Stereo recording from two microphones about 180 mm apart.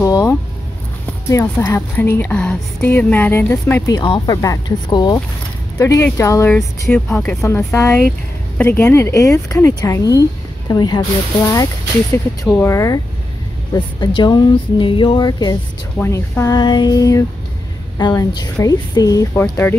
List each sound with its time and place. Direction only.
0.0 s a woman's voice: 20° left (ahead or behind)